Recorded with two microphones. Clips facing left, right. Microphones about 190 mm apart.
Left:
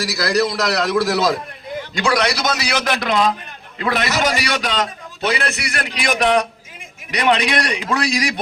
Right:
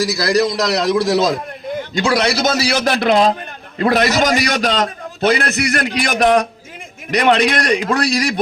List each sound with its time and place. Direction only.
0.2 s a man's voice: 20° right (ahead or behind); by 8.3 s 40° right (ahead or behind)